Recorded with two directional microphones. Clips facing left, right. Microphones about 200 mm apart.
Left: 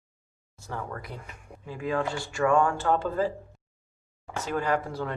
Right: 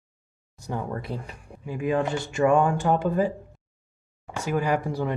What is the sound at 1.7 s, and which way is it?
Speech, 15° right (ahead or behind).